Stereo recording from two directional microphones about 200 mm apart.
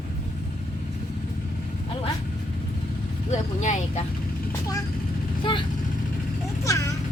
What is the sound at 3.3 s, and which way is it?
Speech, 35° left (ahead or behind).